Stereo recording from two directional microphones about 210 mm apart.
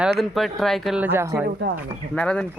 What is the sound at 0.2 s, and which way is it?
Speech, centre (ahead or behind).